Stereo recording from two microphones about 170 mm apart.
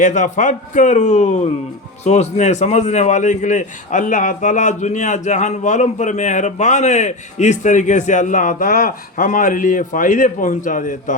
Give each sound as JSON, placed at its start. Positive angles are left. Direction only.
{"t": 0.0, "sound": "a man's voice", "side_deg": 45}